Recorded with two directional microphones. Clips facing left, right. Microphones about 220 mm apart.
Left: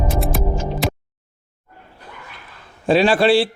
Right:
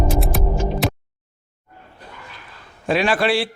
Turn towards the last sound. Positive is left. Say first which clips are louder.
# left 5 dB
turn(degrees=30)  # may be behind; listen again after turning